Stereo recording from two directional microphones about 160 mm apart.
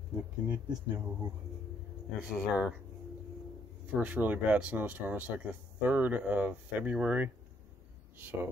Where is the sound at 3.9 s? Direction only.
10° right (ahead or behind).